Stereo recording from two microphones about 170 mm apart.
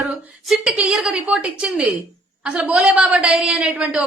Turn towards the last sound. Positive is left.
turn(degrees=-5)  # may be behind; listen again after turning